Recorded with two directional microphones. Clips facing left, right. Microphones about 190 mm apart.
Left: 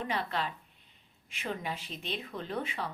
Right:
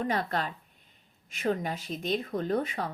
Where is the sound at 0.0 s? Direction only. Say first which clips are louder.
Right 4 dB; 45° right (ahead or behind).